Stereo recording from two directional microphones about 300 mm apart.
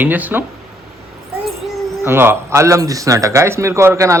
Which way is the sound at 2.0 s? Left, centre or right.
Centre.